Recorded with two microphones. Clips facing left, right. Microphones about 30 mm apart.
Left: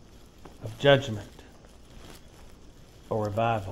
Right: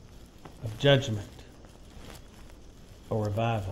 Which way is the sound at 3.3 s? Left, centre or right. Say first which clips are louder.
Left 5 dB; left.